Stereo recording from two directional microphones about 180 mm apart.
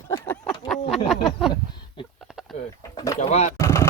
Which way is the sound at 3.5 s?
15° left (ahead or behind).